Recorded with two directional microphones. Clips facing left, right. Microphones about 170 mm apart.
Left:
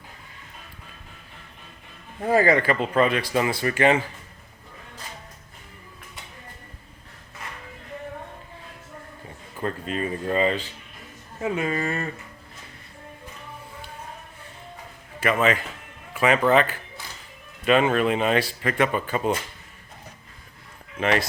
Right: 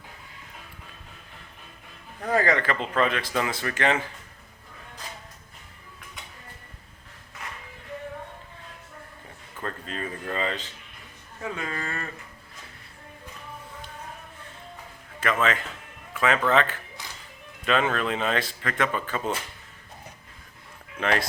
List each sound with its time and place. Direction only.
2.3 s speech: 5° left (ahead or behind)
9.6 s speech: 15° left (ahead or behind)
15.2 s speech: 10° left (ahead or behind)